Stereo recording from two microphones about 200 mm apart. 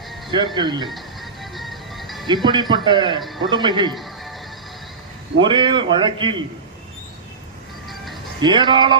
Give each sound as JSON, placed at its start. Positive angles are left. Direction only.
{"t": 0.3, "sound": "a man's voice", "side_deg": -25}
{"t": 0.9, "sound": "music", "side_deg": 0}
{"t": 2.2, "sound": "a man's voice", "side_deg": -20}
{"t": 3.2, "sound": "a man's voice", "side_deg": 0}
{"t": 3.5, "sound": "a man's voice", "side_deg": -25}
{"t": 3.9, "sound": "music", "side_deg": 0}
{"t": 5.4, "sound": "a man's voice", "side_deg": -25}
{"t": 7.9, "sound": "music", "side_deg": 0}
{"t": 8.4, "sound": "a man's voice", "side_deg": -25}